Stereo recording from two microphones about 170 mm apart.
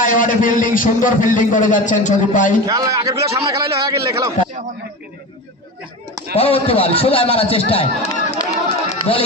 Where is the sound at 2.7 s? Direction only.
20° right (ahead or behind).